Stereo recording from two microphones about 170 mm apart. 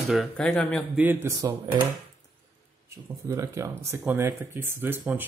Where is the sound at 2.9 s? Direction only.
15° right (ahead or behind).